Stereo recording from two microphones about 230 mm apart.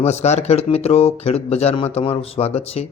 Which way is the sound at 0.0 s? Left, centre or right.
Left.